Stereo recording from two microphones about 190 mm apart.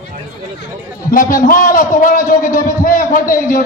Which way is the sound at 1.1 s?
45° left (ahead or behind).